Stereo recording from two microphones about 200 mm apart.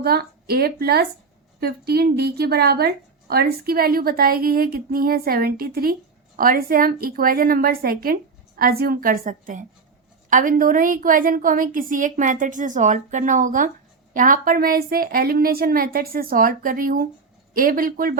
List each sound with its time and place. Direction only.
0.0 s a woman's voice: 50° right (ahead or behind)